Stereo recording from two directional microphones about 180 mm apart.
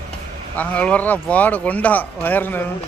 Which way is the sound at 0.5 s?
10° left (ahead or behind).